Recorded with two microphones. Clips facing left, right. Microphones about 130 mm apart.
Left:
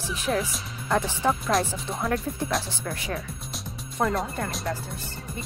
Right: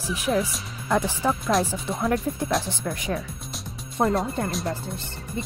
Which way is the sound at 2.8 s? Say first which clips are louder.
Right 3 dB; 20° right (ahead or behind).